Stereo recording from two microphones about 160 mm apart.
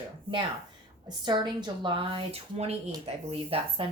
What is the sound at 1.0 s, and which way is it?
A woman's voice, 30° right (ahead or behind).